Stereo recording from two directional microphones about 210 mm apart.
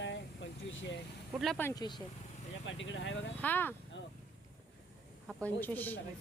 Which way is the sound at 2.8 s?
65° left (ahead or behind).